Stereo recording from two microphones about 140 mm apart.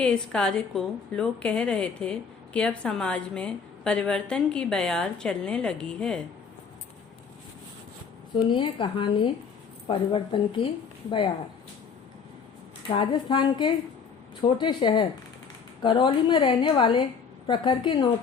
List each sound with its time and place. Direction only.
0.0 s a woman's voice: 5° left (ahead or behind)
8.4 s a woman's voice: 35° left (ahead or behind)
13.0 s a woman's voice: 30° left (ahead or behind)